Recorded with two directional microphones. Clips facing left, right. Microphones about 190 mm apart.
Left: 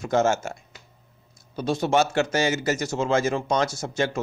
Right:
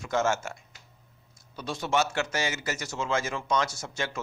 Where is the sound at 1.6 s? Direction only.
35° left (ahead or behind).